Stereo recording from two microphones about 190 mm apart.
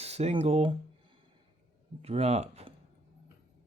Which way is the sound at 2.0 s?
35° right (ahead or behind).